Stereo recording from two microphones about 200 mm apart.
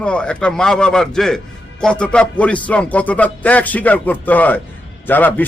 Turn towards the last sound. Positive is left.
turn(degrees=10)  # may be behind; listen again after turning